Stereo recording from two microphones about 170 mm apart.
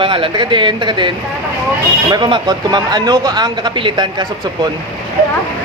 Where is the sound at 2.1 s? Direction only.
25° right (ahead or behind).